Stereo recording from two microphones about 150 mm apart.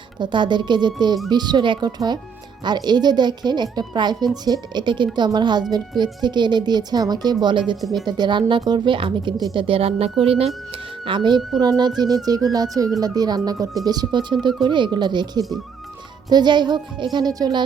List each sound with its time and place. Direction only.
0.2 s speech: 30° right (ahead or behind)
7.8 s speech: centre (ahead or behind)
8.0 s speech: 30° right (ahead or behind)